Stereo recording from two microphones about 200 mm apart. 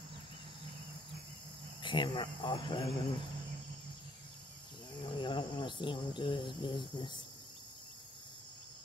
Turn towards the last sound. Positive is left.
turn(degrees=25)  # may be behind; listen again after turning